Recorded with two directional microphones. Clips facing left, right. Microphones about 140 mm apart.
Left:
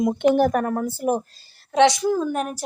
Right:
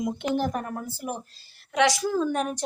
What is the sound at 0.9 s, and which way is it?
Speech, 45° left (ahead or behind).